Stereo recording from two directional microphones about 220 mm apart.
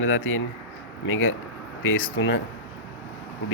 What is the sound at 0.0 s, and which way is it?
A man's voice, 65° left (ahead or behind).